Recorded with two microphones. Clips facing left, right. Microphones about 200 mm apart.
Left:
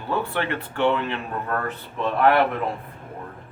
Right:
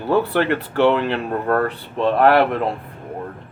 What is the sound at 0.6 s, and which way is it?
Speech, 80° right.